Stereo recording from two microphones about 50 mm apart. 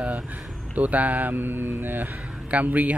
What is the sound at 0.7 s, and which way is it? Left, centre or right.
Speech, right.